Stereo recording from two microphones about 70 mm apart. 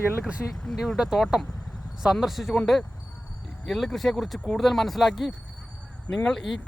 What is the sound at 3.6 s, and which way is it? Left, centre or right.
Speech, centre.